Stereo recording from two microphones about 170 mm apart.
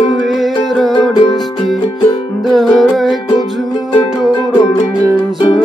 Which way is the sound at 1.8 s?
30° left (ahead or behind).